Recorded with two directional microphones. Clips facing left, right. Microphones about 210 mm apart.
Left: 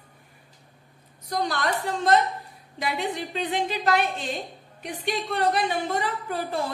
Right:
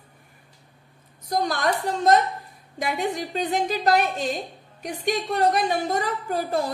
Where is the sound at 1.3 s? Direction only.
45° right (ahead or behind).